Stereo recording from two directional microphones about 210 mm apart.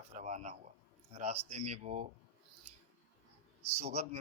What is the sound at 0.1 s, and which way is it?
Speech, 35° right (ahead or behind).